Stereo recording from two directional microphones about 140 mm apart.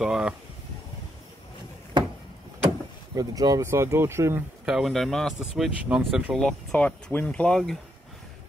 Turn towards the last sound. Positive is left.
turn(degrees=5)  # may be behind; listen again after turning